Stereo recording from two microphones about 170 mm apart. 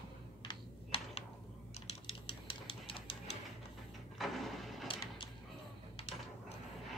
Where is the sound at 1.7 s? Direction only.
40° left (ahead or behind).